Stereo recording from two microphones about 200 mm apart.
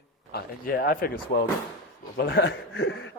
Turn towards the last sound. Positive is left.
turn(degrees=80)